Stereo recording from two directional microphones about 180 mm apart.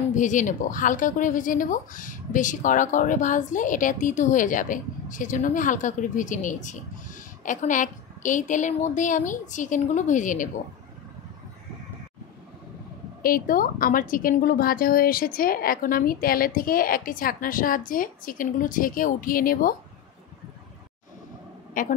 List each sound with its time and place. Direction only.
0.1 s speech: 45° left (ahead or behind)
13.2 s speech: 50° left (ahead or behind)
21.8 s speech: 50° left (ahead or behind)